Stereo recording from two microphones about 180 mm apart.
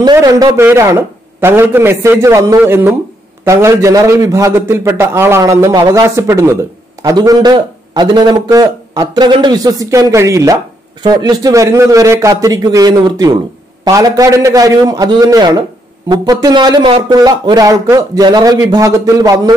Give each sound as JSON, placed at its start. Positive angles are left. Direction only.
{"t": 0.0, "sound": "a man's voice", "side_deg": -20}